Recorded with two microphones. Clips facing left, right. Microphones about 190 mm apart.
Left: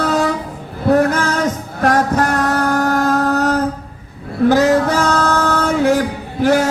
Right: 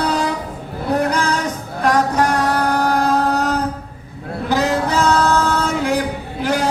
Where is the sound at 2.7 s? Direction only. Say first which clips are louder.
Left 1 dB; 45° left (ahead or behind).